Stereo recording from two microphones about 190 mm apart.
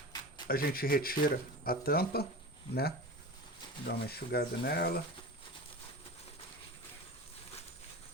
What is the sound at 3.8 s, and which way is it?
Speech, 55° left (ahead or behind).